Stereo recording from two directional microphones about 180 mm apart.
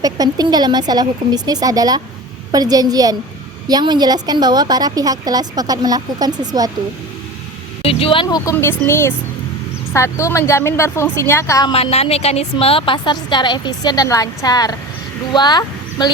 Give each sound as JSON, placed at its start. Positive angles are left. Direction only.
{"t": 0.0, "sound": "a woman's voice", "side_deg": -20}
{"t": 7.8, "sound": "a woman's voice", "side_deg": 30}
{"t": 8.8, "sound": "a woman's voice", "side_deg": 15}
{"t": 11.7, "sound": "a woman's voice", "side_deg": 35}